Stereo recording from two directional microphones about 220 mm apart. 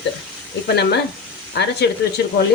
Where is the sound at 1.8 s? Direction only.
50° left (ahead or behind).